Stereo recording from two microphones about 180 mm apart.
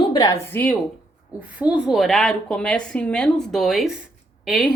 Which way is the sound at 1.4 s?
5° right (ahead or behind).